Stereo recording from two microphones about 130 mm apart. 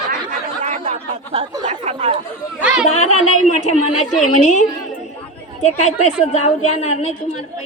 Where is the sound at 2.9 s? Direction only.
55° left (ahead or behind).